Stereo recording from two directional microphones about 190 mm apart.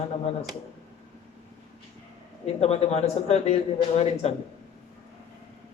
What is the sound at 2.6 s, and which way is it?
A man's voice, 35° left (ahead or behind).